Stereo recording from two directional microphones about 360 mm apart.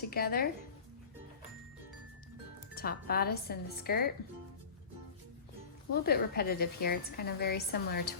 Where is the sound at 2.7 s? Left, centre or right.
Left.